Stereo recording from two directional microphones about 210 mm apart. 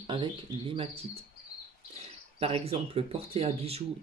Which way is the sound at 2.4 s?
25° right (ahead or behind).